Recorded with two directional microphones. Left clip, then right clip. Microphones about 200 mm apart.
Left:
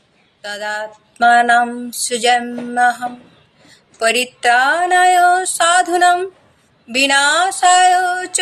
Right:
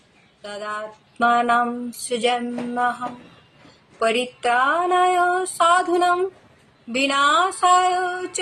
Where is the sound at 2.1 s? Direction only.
5° right (ahead or behind).